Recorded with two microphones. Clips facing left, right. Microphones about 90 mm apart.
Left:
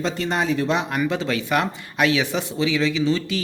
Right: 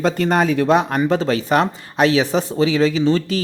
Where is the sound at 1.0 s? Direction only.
35° right (ahead or behind).